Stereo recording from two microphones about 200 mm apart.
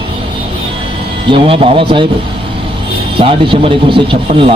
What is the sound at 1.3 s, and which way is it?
Speech, 25° right (ahead or behind).